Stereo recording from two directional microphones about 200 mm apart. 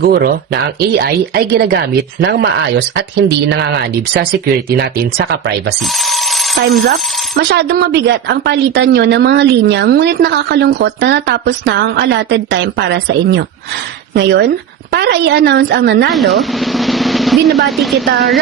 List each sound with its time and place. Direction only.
0.0 s speech: 50° right (ahead or behind)
6.8 s speech: 55° right (ahead or behind)
16.1 s drum roll: centre (ahead or behind)
17.9 s speech: 55° right (ahead or behind)